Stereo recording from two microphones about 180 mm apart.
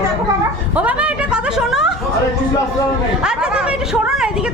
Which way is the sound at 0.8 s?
5° right (ahead or behind).